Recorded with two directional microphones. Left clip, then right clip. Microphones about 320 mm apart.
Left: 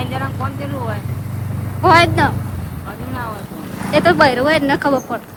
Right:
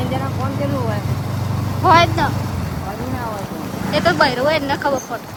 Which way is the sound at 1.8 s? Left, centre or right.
Left.